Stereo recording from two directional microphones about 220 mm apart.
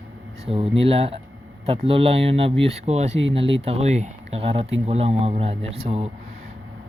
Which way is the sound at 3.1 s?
55° right (ahead or behind).